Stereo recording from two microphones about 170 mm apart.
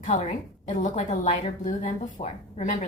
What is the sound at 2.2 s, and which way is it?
Speech, 35° left (ahead or behind).